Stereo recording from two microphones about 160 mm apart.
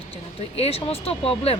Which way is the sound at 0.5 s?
40° left (ahead or behind).